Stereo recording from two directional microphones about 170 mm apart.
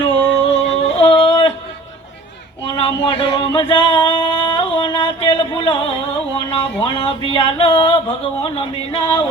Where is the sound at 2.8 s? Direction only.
35° left (ahead or behind).